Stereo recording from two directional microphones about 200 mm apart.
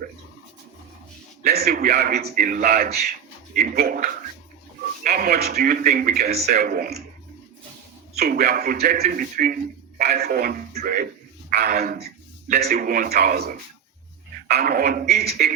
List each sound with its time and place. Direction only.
1.5 s a man's voice: 50° right (ahead or behind)
8.1 s a man's voice: 50° right (ahead or behind)